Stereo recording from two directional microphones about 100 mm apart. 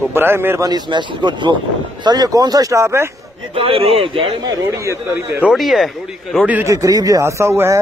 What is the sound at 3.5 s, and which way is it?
Speech, 70° right (ahead or behind).